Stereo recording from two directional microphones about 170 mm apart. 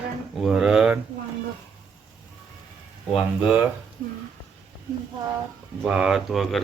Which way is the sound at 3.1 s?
5° right (ahead or behind).